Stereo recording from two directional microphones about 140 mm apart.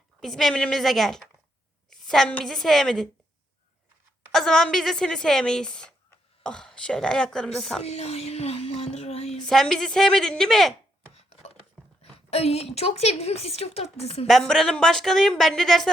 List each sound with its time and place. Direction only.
0.2 s a woman's voice: centre (ahead or behind)
4.3 s a woman's voice: 5° left (ahead or behind)
7.8 s a sound: 50° left (ahead or behind)
9.5 s speech: 5° left (ahead or behind)
12.1 s a woman's voice: 45° left (ahead or behind)
14.3 s speech: 5° left (ahead or behind)